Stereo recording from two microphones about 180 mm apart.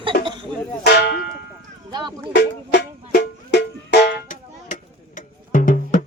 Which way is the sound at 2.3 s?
65° left (ahead or behind).